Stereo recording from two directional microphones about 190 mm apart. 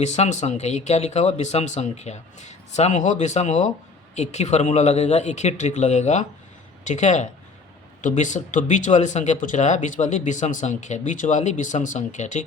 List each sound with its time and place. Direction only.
0.0 s speech: 35° left (ahead or behind)